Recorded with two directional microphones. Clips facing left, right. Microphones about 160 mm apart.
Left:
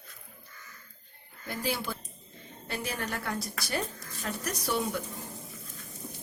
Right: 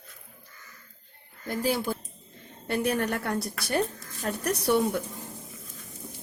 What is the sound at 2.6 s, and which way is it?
A woman's voice, 55° right (ahead or behind).